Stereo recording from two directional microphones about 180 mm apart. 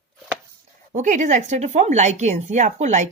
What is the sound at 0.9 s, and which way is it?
Speech, 40° right (ahead or behind).